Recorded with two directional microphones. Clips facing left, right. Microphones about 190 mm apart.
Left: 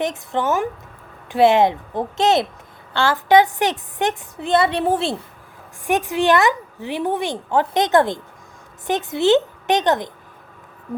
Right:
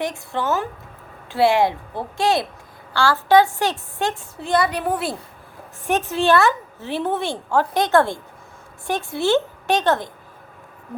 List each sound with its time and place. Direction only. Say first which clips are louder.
0.0 s a woman's voice: left 3 dB; 20° left (ahead or behind)
5.8 s a woman's voice: left 1 dB; 15° left (ahead or behind)